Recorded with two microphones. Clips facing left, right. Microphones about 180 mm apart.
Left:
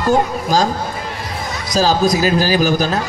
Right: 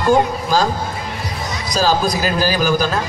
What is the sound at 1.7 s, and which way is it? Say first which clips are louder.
Speech: left 2 dB; 40° left (ahead or behind).